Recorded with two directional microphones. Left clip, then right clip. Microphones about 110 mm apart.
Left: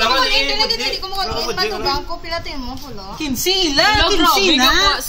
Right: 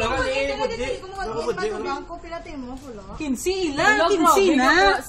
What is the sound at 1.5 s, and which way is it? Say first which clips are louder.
Speech: left 6 dB; 20° left (ahead or behind).